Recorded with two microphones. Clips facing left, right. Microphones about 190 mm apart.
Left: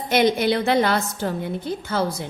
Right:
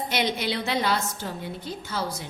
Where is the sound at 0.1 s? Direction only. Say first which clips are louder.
Left 11 dB; 50° left (ahead or behind).